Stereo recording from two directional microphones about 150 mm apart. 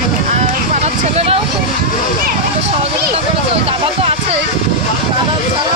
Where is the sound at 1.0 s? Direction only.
45° right (ahead or behind).